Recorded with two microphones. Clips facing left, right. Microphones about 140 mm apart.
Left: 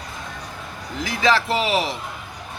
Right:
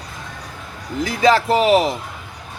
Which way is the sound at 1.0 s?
45° right (ahead or behind).